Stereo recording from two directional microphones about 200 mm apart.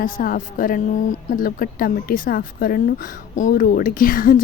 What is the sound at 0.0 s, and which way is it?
A woman's voice, 45° left (ahead or behind).